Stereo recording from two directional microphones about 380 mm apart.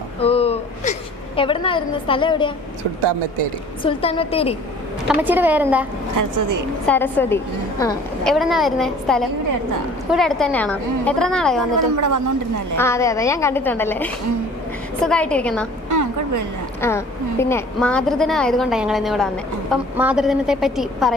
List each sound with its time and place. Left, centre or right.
0.2 s a sound: centre
1.4 s a woman's voice: centre
3.0 s speech: right
3.8 s a woman's voice: centre
5.0 s a woman's voice: centre
6.1 s a woman's voice: right
6.8 s a woman's voice: centre
11.8 s a woman's voice: right
12.7 s a woman's voice: centre
15.9 s a sound: right
16.8 s a woman's voice: centre